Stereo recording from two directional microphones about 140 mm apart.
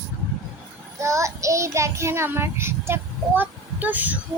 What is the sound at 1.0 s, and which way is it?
A child's voice, 20° right (ahead or behind).